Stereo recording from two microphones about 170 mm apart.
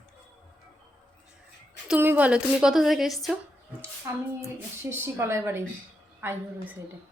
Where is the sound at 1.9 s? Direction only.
10° right (ahead or behind).